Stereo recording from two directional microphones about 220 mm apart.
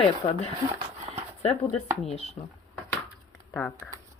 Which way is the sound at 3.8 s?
15° right (ahead or behind).